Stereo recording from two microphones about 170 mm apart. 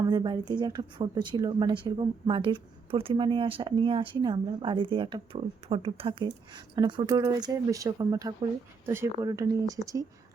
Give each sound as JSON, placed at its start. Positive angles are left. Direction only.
{"t": 0.0, "sound": "speech", "side_deg": -25}